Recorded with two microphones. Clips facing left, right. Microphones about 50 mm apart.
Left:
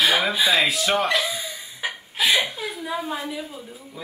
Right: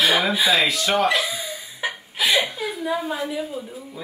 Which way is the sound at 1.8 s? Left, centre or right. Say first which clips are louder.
Even; centre.